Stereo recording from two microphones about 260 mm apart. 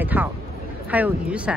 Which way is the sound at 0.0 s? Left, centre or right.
Centre.